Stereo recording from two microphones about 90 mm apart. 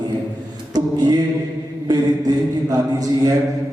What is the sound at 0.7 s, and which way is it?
Mantra, 50° right (ahead or behind).